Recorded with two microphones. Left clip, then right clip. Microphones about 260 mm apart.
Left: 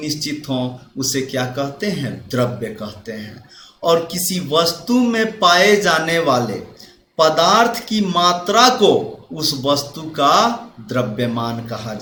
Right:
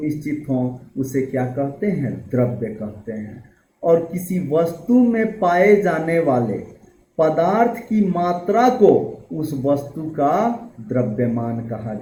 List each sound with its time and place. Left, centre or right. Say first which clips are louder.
0.4 s speech: even; left
4.1 s speech: left 3 dB; left